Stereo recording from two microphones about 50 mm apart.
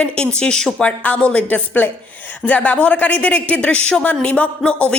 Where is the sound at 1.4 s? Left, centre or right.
Left.